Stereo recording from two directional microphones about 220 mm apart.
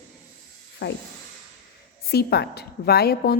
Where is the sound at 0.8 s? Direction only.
50° left (ahead or behind).